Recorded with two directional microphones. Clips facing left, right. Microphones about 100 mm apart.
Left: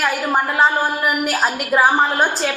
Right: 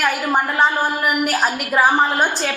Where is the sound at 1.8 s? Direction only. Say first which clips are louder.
Even; 20° left (ahead or behind).